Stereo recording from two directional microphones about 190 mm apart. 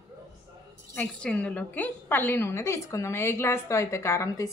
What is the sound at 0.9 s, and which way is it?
A woman's voice, 5° left (ahead or behind).